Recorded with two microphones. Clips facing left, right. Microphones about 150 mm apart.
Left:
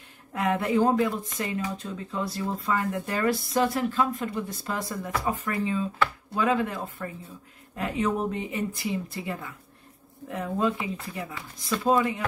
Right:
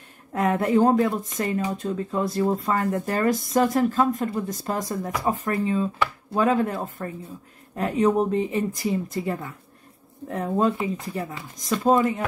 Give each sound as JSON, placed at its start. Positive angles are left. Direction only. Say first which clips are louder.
{"t": 0.3, "sound": "speech", "louder": "right 4 dB", "side_deg": -45}